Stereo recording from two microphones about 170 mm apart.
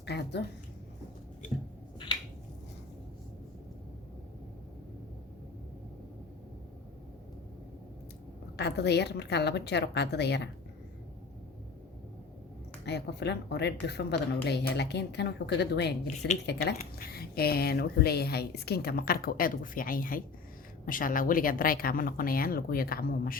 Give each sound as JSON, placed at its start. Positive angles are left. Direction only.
{"t": 0.0, "sound": "speech", "side_deg": 80}
{"t": 8.5, "sound": "a woman's voice", "side_deg": 80}
{"t": 12.8, "sound": "a woman's voice", "side_deg": 80}
{"t": 16.5, "sound": "a woman's voice", "side_deg": 70}